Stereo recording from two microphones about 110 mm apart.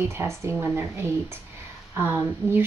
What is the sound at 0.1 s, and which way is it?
Speech, 25° right (ahead or behind).